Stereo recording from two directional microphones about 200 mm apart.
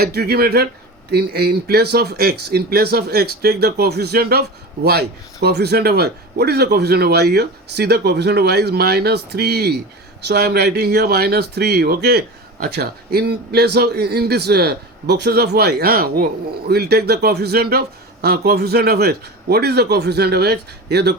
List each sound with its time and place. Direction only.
0.0 s speech: 50° right (ahead or behind)